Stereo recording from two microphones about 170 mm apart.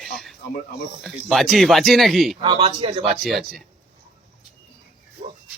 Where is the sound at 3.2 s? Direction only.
Centre (ahead or behind).